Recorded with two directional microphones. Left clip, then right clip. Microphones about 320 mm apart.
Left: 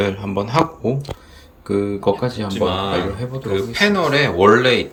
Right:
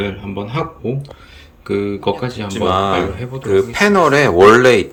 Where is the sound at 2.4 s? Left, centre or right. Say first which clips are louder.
Right 6 dB; centre.